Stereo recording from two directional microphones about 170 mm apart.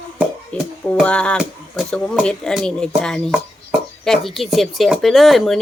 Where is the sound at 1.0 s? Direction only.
5° left (ahead or behind).